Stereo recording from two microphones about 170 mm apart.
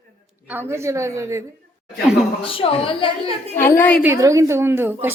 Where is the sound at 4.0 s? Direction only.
15° right (ahead or behind).